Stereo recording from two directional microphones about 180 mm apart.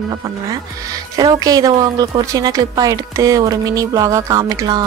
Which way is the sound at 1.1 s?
20° right (ahead or behind).